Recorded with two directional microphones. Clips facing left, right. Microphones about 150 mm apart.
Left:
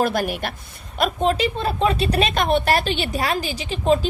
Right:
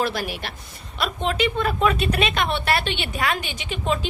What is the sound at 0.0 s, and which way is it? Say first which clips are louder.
A woman's voice: left 4 dB; 50° left (ahead or behind).